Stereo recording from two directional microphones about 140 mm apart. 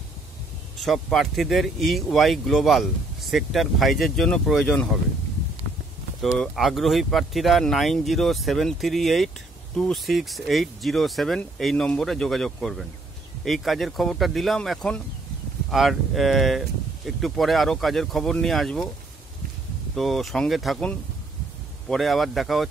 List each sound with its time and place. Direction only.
0.7 s speech: centre (ahead or behind)
6.3 s speech: centre (ahead or behind)
20.0 s speech: centre (ahead or behind)